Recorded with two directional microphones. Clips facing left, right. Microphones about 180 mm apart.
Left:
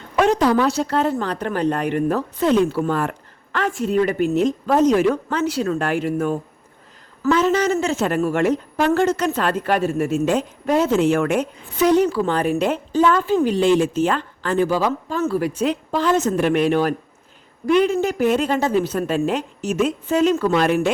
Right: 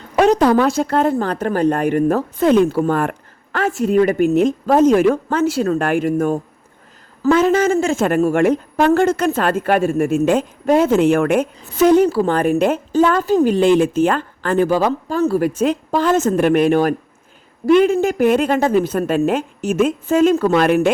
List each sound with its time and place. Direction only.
0.2 s a sound: 40° right (ahead or behind)
0.4 s speech: 50° right (ahead or behind)
12.3 s speech: 50° right (ahead or behind)